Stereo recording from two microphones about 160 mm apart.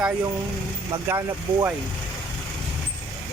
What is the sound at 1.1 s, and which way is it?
Speech, 20° right (ahead or behind).